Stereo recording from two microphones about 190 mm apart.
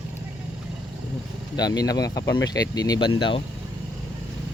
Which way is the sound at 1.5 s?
20° left (ahead or behind).